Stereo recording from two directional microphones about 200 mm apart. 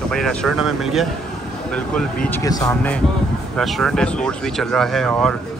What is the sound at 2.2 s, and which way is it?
Speech, 15° left (ahead or behind).